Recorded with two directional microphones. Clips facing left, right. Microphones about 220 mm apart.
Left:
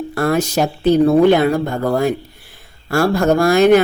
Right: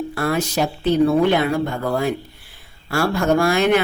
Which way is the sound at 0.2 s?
45° left (ahead or behind).